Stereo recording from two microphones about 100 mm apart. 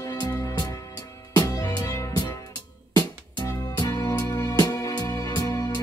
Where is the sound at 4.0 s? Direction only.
30° left (ahead or behind).